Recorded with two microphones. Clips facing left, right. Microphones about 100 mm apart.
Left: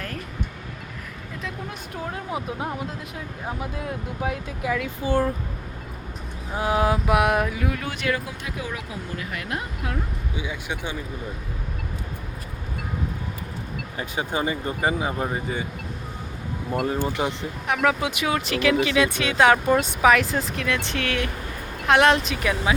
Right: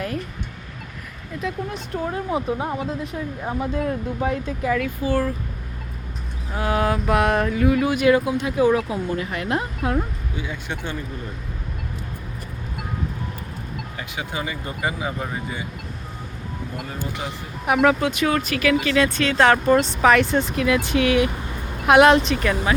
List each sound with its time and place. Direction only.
1.4 s speech: centre (ahead or behind)
4.9 s speech: 20° left (ahead or behind)
6.5 s speech: 15° left (ahead or behind); by 8.5 s 20° right (ahead or behind)
8.5 s speech: 35° right (ahead or behind)
10.3 s speech: 15° left (ahead or behind)
13.9 s speech: 30° left (ahead or behind)
17.0 s speech: 20° left (ahead or behind)
17.7 s speech: 10° right (ahead or behind)
18.0 s speech: 15° left (ahead or behind)